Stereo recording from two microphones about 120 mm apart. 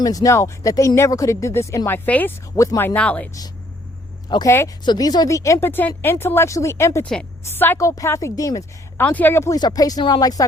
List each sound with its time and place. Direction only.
0.0 s speech: 30° left (ahead or behind); by 3.2 s 10° left (ahead or behind)
4.4 s speech: 25° left (ahead or behind)
4.9 s speech: 35° left (ahead or behind)
7.0 s speech: 10° left (ahead or behind); by 8.6 s 30° left (ahead or behind)
9.0 s speech: 15° left (ahead or behind)
9.6 s speech: 35° left (ahead or behind)